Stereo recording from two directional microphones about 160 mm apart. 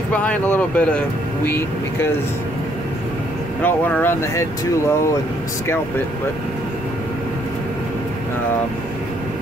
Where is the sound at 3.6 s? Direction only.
10° left (ahead or behind).